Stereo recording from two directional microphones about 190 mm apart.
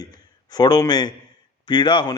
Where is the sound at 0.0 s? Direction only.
20° left (ahead or behind).